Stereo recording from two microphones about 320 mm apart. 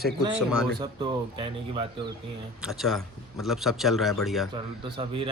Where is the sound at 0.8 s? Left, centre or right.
Centre.